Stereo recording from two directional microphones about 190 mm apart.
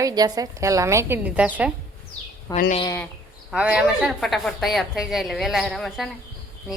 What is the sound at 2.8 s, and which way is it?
Speech, 15° left (ahead or behind).